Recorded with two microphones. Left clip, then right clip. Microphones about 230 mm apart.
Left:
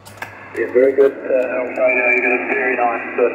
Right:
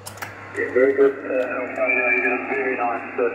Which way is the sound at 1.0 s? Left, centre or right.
Left.